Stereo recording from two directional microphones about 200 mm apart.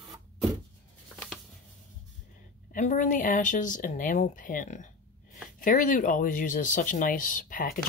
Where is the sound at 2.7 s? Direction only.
40° left (ahead or behind).